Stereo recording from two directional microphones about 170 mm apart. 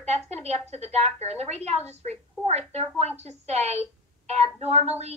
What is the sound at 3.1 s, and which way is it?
A woman's voice, 40° right (ahead or behind).